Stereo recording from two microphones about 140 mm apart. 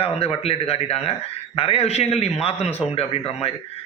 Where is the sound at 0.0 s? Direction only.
45° left (ahead or behind).